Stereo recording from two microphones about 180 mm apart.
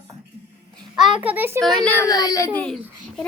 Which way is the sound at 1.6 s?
Centre (ahead or behind).